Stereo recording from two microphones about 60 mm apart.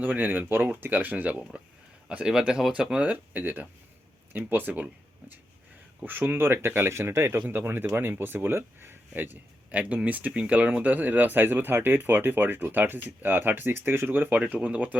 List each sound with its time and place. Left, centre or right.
0.0 s speech: right
6.1 s speech: right
7.3 s speech: right